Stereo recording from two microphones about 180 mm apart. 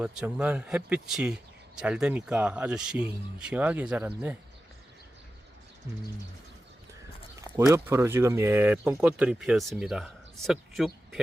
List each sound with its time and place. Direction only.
0.0 s speech: 5° right (ahead or behind)
7.7 s speech: 15° right (ahead or behind)